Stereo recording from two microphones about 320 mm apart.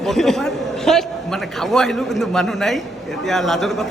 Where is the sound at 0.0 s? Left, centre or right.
Centre.